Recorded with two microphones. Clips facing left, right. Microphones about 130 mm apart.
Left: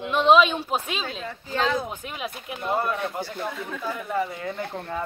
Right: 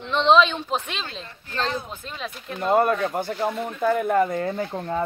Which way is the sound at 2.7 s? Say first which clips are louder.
Right 6 dB; 60° right (ahead or behind).